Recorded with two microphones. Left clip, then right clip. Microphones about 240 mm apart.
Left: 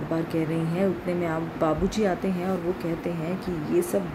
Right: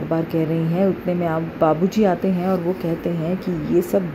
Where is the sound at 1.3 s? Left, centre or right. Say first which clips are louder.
Right 8 dB; centre.